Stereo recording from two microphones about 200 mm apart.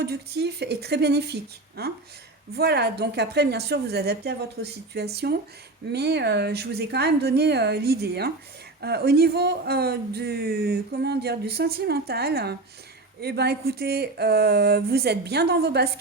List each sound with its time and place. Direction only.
0.0 s a woman's voice: 55° right (ahead or behind)